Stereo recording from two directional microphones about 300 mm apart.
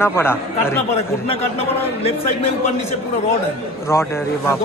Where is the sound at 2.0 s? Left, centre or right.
Centre.